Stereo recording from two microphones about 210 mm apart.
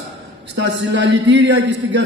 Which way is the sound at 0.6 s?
55° right (ahead or behind).